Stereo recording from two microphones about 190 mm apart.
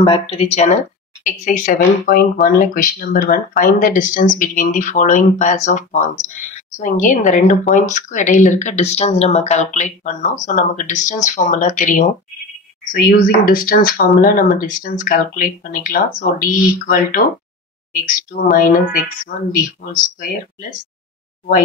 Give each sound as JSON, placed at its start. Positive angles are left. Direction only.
{"t": 0.0, "sound": "speech", "side_deg": 30}